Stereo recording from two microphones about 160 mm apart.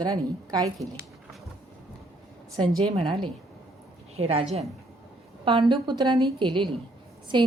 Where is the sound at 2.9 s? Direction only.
30° right (ahead or behind).